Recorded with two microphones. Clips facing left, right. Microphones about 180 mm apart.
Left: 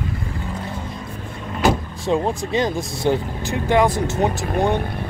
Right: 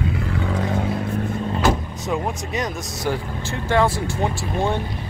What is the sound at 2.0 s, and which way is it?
Speech, 30° left (ahead or behind).